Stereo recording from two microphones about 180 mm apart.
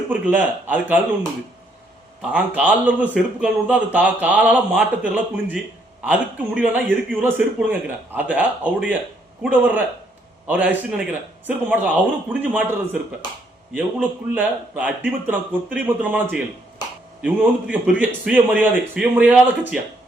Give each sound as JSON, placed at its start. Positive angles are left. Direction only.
{"t": 0.1, "sound": "speech", "side_deg": -10}
{"t": 2.3, "sound": "speech", "side_deg": -10}
{"t": 17.2, "sound": "speech", "side_deg": -10}